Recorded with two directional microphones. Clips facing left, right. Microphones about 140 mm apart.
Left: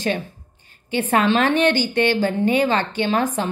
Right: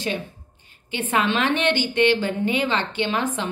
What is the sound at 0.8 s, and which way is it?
A woman's voice, 40° left (ahead or behind).